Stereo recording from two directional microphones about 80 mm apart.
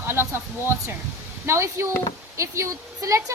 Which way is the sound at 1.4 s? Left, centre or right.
Right.